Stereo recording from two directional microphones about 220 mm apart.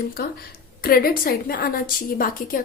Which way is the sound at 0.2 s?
45° left (ahead or behind).